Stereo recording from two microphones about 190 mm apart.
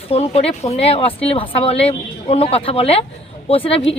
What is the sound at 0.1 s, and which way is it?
Speech, 30° left (ahead or behind).